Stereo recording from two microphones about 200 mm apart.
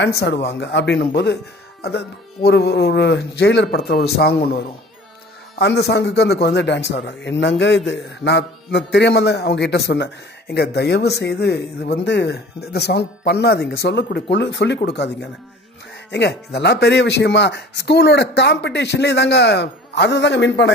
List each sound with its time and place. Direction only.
0.0 s a man's voice: 55° left (ahead or behind)
16.1 s a man's voice: 60° left (ahead or behind)